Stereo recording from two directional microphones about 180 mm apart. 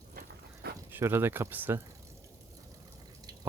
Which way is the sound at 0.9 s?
10° right (ahead or behind).